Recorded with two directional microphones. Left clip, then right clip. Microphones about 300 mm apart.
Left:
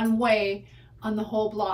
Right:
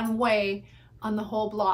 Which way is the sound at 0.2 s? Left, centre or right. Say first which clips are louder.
Even; centre.